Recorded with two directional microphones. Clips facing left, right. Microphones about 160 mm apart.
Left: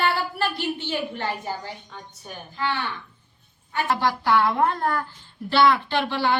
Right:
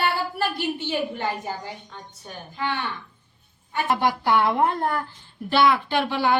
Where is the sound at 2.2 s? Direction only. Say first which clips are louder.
Even; 5° left (ahead or behind).